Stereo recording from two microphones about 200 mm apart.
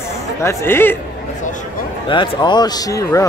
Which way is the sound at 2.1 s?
25° left (ahead or behind).